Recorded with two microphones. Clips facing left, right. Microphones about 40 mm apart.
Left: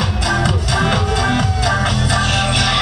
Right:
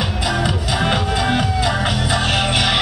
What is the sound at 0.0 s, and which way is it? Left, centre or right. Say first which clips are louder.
Music: left 2 dB; centre.